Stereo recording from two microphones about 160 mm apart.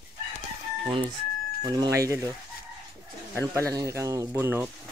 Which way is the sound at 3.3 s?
20° right (ahead or behind).